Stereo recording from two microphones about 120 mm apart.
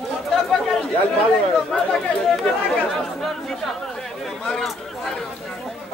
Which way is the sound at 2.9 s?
5° left (ahead or behind).